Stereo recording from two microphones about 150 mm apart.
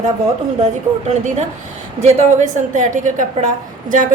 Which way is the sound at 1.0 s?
50° right (ahead or behind).